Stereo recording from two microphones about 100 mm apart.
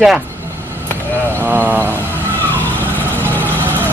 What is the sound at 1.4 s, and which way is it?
Speech, 20° right (ahead or behind).